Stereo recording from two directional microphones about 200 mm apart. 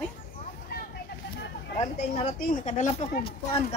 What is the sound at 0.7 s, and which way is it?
Vehicle, 50° left (ahead or behind).